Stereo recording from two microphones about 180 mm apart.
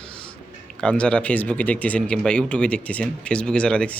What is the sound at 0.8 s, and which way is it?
Speech, 5° left (ahead or behind).